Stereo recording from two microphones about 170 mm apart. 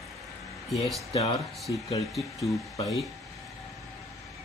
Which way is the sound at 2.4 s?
20° left (ahead or behind).